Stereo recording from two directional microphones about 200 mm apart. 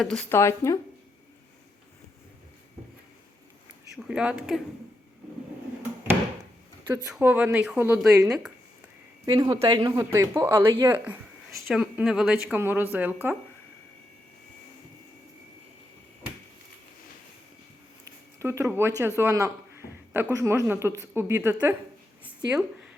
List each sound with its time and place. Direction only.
0.0 s speech: 5° left (ahead or behind)
3.9 s speech: 5° right (ahead or behind)
7.1 s speech: 10° right (ahead or behind)
9.2 s speech: 20° right (ahead or behind)
18.0 s speech: 15° right (ahead or behind)